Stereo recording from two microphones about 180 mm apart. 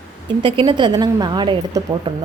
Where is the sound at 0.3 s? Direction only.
30° right (ahead or behind).